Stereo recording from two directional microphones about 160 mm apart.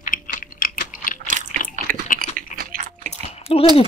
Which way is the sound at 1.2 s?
50° right (ahead or behind).